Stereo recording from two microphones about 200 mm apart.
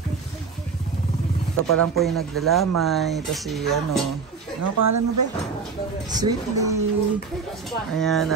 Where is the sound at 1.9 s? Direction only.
Centre (ahead or behind).